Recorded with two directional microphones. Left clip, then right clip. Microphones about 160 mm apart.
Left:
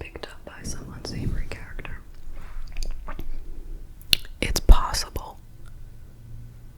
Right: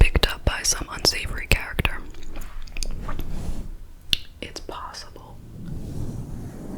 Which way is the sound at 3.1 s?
15° left (ahead or behind).